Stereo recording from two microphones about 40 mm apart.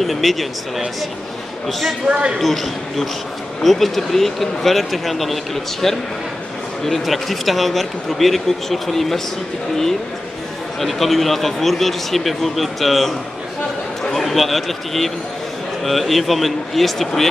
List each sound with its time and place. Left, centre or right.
0.0 s speech: centre
2.0 s speech: right
2.3 s speech: centre
10.8 s a man's voice: centre